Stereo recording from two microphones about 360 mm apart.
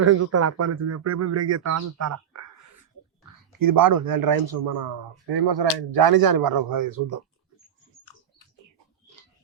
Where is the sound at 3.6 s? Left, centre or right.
Right.